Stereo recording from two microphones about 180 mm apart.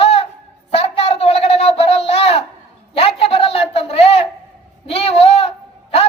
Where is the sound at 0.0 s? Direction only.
35° left (ahead or behind).